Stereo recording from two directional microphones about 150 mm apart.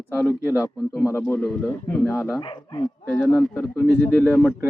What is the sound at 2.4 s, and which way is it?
Speech, 35° left (ahead or behind).